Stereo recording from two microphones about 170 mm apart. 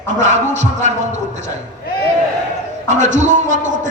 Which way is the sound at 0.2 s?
45° right (ahead or behind).